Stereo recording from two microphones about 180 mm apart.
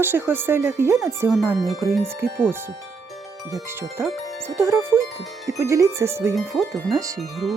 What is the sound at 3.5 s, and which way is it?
Speech, 15° right (ahead or behind).